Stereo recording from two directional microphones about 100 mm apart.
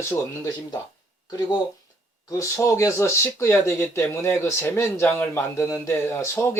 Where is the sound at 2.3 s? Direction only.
30° left (ahead or behind).